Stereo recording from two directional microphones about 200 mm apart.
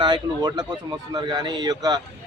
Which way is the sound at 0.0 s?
20° right (ahead or behind).